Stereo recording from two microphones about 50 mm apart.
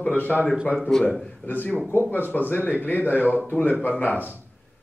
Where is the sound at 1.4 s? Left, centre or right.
Left.